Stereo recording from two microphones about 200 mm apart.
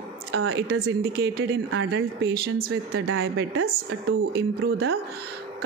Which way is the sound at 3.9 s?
55° right (ahead or behind).